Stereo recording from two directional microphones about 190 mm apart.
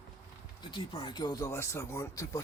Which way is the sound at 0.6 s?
25° left (ahead or behind).